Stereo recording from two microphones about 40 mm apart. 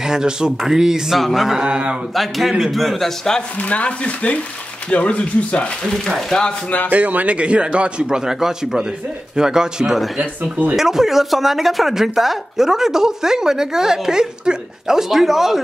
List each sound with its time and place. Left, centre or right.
0.0 s a man's voice: centre
1.6 s a man's voice: right
2.1 s a man's voice: centre
3.5 s speech: left
5.9 s speech: centre
6.9 s speech: right
7.3 s a man's voice: right
8.2 s speech: centre